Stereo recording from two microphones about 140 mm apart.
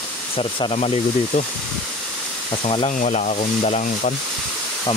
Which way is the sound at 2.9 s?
60° left (ahead or behind).